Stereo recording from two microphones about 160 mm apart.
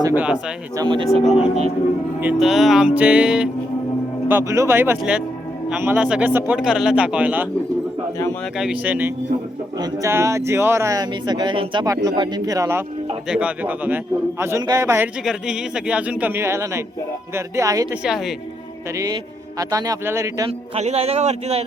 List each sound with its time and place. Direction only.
0.2 s a man's voice: 5° right (ahead or behind)
0.8 s speech: 30° right (ahead or behind)
1.1 s music: centre (ahead or behind)
4.3 s a man's voice: 15° right (ahead or behind)
8.5 s a man's voice: 5° right (ahead or behind)
9.7 s speech: 20° right (ahead or behind)
13.2 s a man's voice: 5° right (ahead or behind)
15.2 s a man's voice: 5° right (ahead or behind); by 17.8 s 20° right (ahead or behind)
18.0 s music: centre (ahead or behind)
18.9 s speech: 20° right (ahead or behind)
20.5 s a man's voice: 40° right (ahead or behind)